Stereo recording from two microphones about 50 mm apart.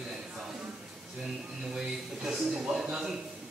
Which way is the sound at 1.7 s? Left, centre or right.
Centre.